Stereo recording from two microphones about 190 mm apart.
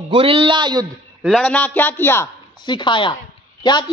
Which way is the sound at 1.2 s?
5° left (ahead or behind).